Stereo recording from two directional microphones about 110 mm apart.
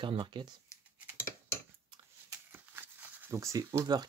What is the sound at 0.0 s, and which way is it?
Speech, 45° right (ahead or behind).